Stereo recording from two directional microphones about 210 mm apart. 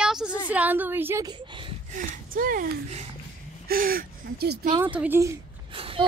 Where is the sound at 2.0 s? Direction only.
45° right (ahead or behind).